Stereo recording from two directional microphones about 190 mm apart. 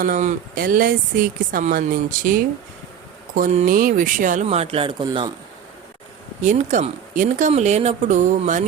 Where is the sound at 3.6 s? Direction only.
45° right (ahead or behind); by 5.3 s 25° right (ahead or behind).